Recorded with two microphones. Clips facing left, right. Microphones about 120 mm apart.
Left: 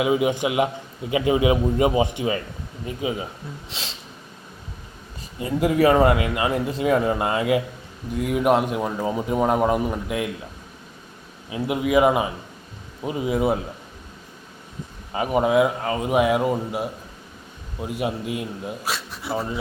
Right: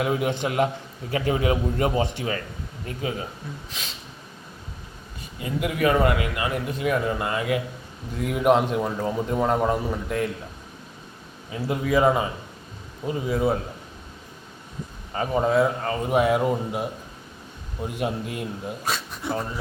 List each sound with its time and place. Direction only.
0.0 s a man's voice: 5° left (ahead or behind)
5.4 s a man's voice: 30° left (ahead or behind)
8.1 s a man's voice: centre (ahead or behind)
11.5 s a man's voice: 15° left (ahead or behind)
15.1 s a man's voice: 15° left (ahead or behind)